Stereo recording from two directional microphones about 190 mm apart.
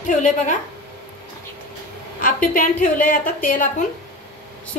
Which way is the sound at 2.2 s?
45° left (ahead or behind).